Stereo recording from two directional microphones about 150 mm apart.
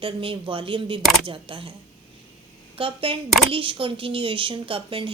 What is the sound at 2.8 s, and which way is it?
A woman's voice, 35° right (ahead or behind).